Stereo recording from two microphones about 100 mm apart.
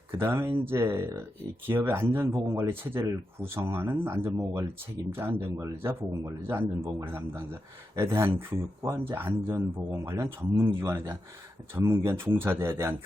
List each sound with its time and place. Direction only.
0.1 s speech: 25° right (ahead or behind)